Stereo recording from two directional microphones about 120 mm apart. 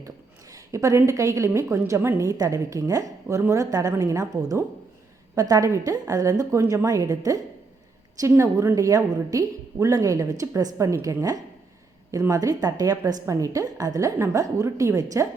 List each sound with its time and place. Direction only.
0.5 s a woman's voice: 25° right (ahead or behind)